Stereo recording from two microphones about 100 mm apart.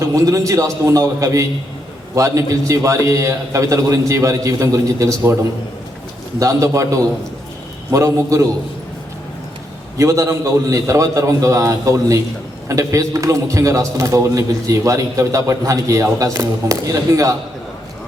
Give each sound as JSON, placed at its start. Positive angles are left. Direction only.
{"t": 0.0, "sound": "a man's voice", "side_deg": -30}
{"t": 6.4, "sound": "a man's voice", "side_deg": -35}
{"t": 10.0, "sound": "a man's voice", "side_deg": -30}